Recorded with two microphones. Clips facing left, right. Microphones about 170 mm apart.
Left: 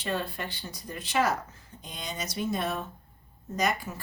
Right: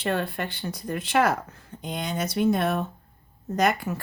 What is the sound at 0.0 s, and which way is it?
A woman's voice, 60° right (ahead or behind).